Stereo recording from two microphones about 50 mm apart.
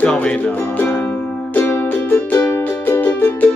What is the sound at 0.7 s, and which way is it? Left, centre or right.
Music, left.